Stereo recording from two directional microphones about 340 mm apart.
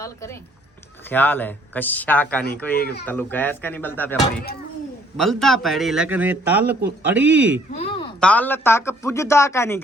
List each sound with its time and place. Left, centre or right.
0.0 s speech: centre
2.7 s speech: left
3.1 s speech: centre